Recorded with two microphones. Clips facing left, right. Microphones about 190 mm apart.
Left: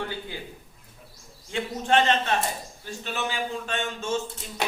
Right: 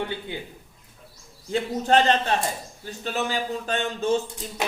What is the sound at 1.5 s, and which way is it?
Speech, 35° right (ahead or behind).